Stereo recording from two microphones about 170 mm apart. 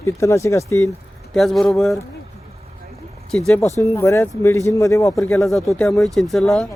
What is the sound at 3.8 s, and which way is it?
A man's voice, 15° left (ahead or behind).